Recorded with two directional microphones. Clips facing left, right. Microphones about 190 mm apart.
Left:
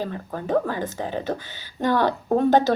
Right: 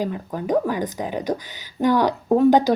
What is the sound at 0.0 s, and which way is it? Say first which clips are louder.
A woman's voice: right 3 dB; 15° right (ahead or behind).